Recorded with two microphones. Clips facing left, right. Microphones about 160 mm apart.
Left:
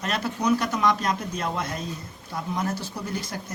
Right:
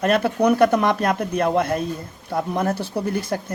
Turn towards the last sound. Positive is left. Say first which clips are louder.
# right 9 dB
turn(degrees=-55)  # may be behind; listen again after turning